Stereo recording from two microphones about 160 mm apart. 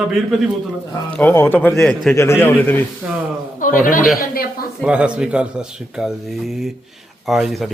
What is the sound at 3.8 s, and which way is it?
Speech, 55° left (ahead or behind).